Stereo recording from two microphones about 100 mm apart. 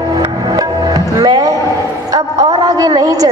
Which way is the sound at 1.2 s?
40° right (ahead or behind).